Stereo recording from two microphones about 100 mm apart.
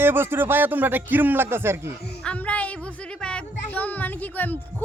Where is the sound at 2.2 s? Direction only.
10° left (ahead or behind).